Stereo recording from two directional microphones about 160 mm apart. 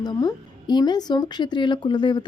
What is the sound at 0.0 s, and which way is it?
A woman's voice, 25° left (ahead or behind).